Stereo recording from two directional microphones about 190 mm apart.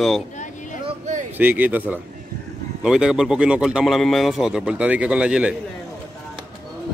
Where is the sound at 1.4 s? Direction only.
10° right (ahead or behind).